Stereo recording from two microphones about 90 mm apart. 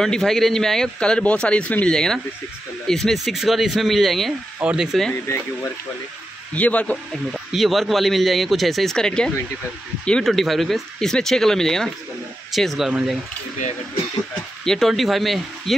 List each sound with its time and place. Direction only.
0.0 s speech: 5° left (ahead or behind)
4.6 s speech: 15° right (ahead or behind)
5.1 s speech: 30° left (ahead or behind)
6.5 s speech: 15° left (ahead or behind)
7.3 s speech: centre (ahead or behind)
14.6 s speech: 5° left (ahead or behind)